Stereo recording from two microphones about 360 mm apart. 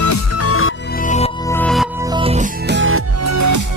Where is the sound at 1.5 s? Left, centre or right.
Centre.